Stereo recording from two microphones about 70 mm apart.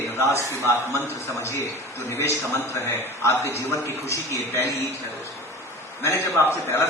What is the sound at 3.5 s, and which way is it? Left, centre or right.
A man's voice, left.